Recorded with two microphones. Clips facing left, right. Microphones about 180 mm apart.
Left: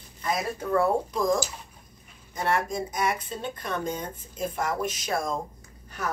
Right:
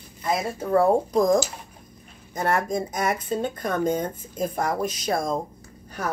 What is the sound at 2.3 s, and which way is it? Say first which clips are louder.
Speech: right 3 dB; 45° right (ahead or behind).